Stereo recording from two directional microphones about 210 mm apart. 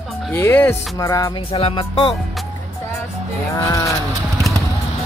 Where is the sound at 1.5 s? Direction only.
25° left (ahead or behind).